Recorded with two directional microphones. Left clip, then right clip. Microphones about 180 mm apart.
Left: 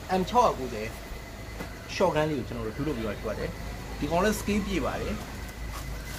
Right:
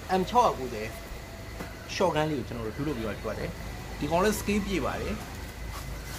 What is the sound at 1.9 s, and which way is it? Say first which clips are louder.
Speech: left 1 dB; 15° right (ahead or behind).